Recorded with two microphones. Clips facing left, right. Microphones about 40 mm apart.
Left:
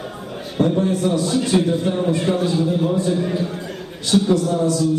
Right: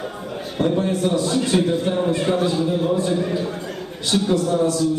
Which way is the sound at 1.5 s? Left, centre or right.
Centre.